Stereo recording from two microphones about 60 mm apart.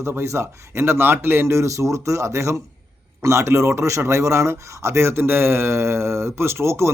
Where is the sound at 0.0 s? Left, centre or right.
Right.